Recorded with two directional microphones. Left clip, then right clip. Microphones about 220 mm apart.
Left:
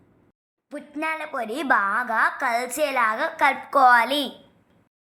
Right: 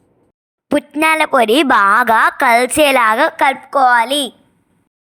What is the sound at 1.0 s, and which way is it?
A woman's voice, 45° right (ahead or behind).